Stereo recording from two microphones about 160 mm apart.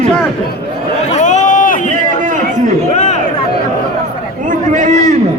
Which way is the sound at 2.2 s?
50° right (ahead or behind).